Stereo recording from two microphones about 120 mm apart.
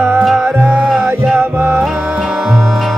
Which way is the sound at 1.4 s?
20° right (ahead or behind).